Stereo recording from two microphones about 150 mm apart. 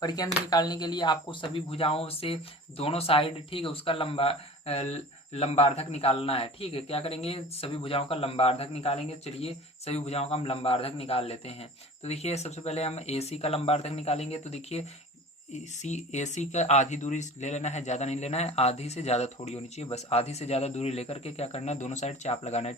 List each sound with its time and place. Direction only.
0.0 s speech: 25° left (ahead or behind); by 22.7 s 45° left (ahead or behind)